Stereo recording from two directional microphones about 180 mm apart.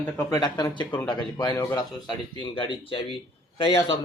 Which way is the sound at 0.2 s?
20° left (ahead or behind).